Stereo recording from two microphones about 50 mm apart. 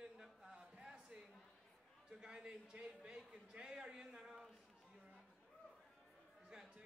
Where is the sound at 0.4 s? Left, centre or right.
Centre.